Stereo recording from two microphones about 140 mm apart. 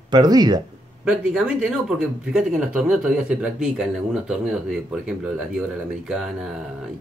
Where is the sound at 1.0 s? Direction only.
5° right (ahead or behind).